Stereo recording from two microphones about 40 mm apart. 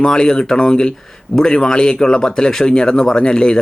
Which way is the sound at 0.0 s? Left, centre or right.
Centre.